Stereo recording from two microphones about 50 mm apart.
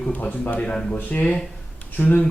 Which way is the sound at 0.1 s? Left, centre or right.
Left.